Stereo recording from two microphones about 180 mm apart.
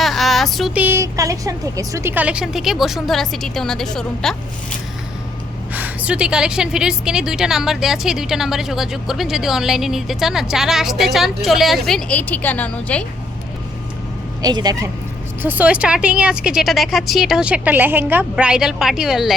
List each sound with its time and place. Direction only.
0.0 s a woman's voice: centre (ahead or behind)
5.7 s a woman's voice: 10° right (ahead or behind); by 13.1 s 10° left (ahead or behind)
14.4 s speech: 20° right (ahead or behind)
15.4 s a woman's voice: 10° right (ahead or behind)